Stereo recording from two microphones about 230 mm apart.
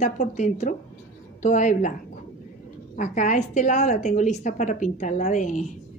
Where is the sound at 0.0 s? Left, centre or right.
Left.